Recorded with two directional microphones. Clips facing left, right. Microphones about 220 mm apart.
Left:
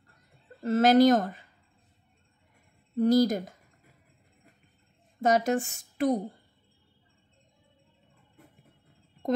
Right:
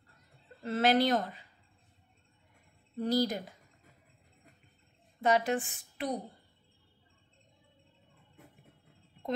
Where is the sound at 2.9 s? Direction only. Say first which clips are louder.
Left 8 dB; 45° left (ahead or behind).